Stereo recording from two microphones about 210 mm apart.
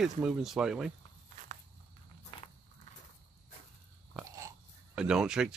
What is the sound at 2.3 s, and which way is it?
Walk, 25° left (ahead or behind).